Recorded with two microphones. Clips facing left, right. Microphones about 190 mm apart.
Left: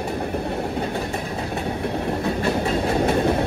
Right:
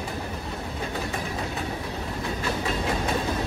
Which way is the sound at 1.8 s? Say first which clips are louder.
Left 8 dB; 60° left (ahead or behind).